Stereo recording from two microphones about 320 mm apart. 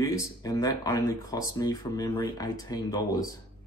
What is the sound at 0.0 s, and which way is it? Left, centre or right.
Speech, centre.